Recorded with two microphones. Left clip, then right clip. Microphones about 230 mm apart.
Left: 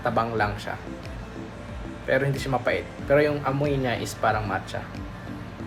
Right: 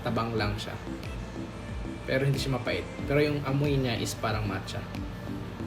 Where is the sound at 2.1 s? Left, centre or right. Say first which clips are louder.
Left 5 dB; centre.